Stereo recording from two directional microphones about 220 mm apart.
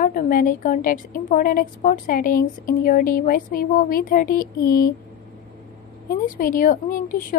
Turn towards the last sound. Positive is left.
turn(degrees=40)  # may be behind; listen again after turning